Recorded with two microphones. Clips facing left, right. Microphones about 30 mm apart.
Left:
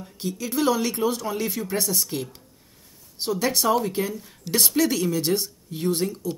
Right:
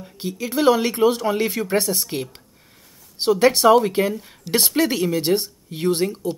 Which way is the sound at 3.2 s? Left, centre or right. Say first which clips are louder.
Right 8 dB; right.